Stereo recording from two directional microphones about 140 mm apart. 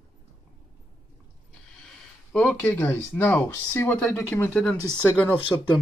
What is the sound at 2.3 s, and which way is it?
Speech, 10° left (ahead or behind).